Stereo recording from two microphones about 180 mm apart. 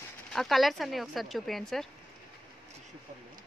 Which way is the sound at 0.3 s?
Centre (ahead or behind).